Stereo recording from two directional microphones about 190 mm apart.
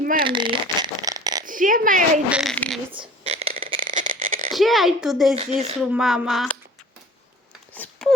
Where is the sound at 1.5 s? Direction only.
45° right (ahead or behind).